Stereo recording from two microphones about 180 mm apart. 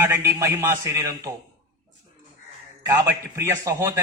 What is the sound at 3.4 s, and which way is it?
Speech, 15° right (ahead or behind).